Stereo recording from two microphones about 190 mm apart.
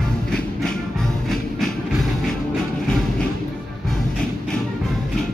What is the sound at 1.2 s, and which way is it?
Train, centre (ahead or behind).